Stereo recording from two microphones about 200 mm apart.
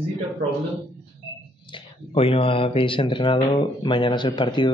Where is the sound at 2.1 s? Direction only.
25° left (ahead or behind).